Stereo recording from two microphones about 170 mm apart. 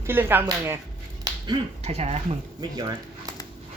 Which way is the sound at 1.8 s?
35° right (ahead or behind).